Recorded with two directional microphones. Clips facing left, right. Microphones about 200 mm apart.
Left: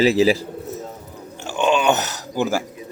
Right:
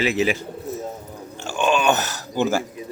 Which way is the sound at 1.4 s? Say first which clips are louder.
Left 2 dB; 20° left (ahead or behind).